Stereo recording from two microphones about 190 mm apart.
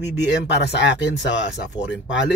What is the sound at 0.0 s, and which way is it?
Speech, 65° left (ahead or behind).